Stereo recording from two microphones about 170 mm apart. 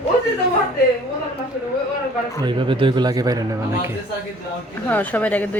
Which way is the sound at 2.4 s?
30° right (ahead or behind).